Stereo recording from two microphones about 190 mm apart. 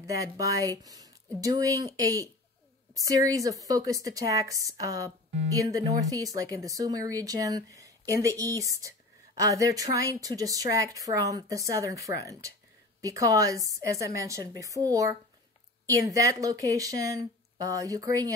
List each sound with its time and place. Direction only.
0.0 s a woman's voice: 15° right (ahead or behind)